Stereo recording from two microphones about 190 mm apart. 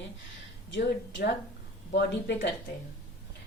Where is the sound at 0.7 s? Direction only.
70° left (ahead or behind).